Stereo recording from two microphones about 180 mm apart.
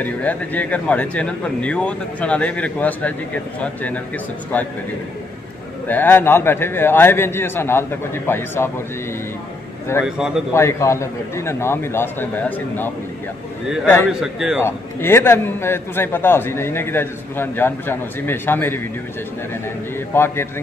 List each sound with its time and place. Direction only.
0.0 s a man's voice: 10° left (ahead or behind)
5.9 s a man's voice: 10° left (ahead or behind)
10.0 s a man's voice: 5° right (ahead or behind)
10.5 s a man's voice: 15° left (ahead or behind)
14.2 s a man's voice: 5° right (ahead or behind)
14.6 s a man's voice: 15° left (ahead or behind)
20.1 s a man's voice: 15° left (ahead or behind)